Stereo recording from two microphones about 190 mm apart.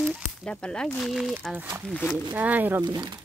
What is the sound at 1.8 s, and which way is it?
Speech, 5° left (ahead or behind).